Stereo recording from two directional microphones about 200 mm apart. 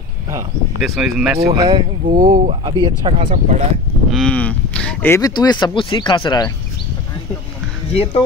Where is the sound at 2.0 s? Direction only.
35° right (ahead or behind).